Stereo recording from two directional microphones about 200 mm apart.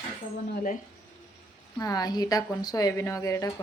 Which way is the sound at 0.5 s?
40° left (ahead or behind).